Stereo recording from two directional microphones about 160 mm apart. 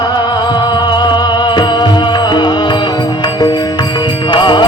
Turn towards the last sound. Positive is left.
turn(degrees=30)  # may be behind; listen again after turning